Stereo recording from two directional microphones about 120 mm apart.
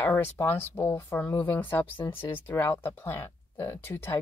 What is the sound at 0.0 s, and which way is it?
Speech, 20° left (ahead or behind).